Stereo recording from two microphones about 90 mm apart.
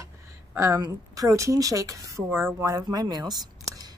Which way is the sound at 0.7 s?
45° right (ahead or behind).